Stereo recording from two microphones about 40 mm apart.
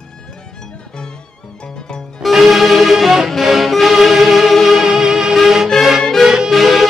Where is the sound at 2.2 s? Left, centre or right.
Centre.